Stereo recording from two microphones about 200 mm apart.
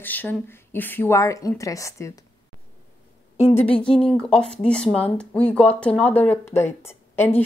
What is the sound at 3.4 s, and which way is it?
Speech, 30° left (ahead or behind).